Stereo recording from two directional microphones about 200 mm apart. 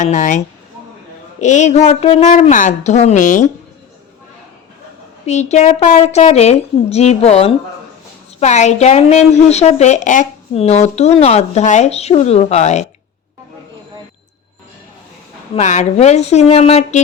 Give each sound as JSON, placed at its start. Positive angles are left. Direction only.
{"t": 0.0, "sound": "a woman's voice", "side_deg": 40}
{"t": 5.2, "sound": "a woman's voice", "side_deg": 35}
{"t": 15.5, "sound": "a woman's voice", "side_deg": 35}